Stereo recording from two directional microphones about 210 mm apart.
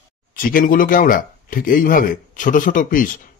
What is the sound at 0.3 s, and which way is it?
Speech, 45° left (ahead or behind).